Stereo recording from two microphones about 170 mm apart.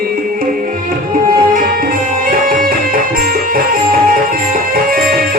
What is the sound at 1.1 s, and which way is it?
Music, 60° right (ahead or behind).